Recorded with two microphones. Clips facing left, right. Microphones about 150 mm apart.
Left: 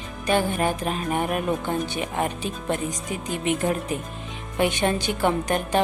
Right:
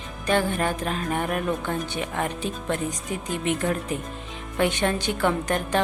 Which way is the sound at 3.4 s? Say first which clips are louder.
Left 2 dB; 20° left (ahead or behind).